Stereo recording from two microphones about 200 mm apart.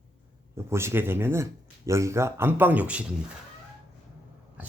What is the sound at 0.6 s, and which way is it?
Speech, 15° right (ahead or behind).